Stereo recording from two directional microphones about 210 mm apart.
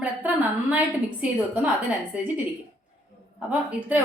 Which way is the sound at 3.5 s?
5° right (ahead or behind).